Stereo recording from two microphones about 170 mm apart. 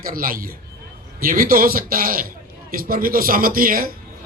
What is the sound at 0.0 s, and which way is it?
Speech, 55° right (ahead or behind).